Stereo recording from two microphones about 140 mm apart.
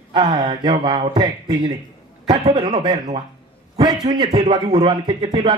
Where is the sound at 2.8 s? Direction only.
30° right (ahead or behind).